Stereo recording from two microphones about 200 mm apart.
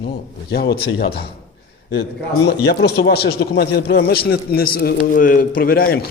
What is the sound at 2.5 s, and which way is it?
A man's voice, 55° left (ahead or behind).